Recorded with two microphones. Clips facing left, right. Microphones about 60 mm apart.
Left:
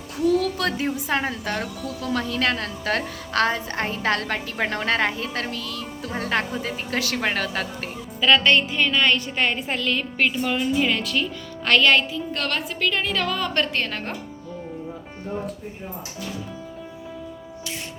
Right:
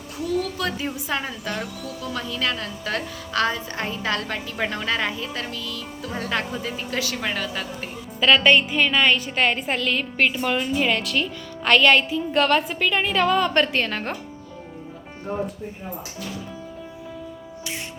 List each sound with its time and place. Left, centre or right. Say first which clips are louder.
0.9 s a woman's voice: left 3 dB; left
8.2 s a woman's voice: right 1 dB; centre; by 13.5 s right
13.7 s speech: right 2 dB; centre